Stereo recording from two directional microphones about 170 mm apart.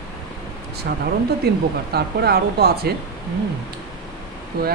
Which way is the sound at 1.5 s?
70° right (ahead or behind).